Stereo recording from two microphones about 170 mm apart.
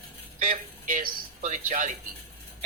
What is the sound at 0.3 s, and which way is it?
Speech, 55° right (ahead or behind).